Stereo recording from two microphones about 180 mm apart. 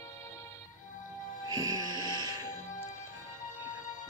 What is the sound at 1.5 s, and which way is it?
Music, 20° right (ahead or behind).